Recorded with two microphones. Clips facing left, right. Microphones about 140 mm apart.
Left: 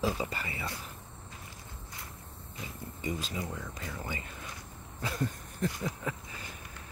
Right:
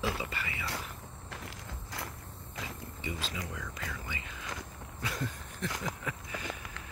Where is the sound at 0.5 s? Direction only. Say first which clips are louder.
Even; 85° right.